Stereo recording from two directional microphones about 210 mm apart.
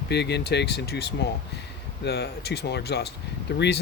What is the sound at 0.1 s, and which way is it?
Speech, 55° left (ahead or behind).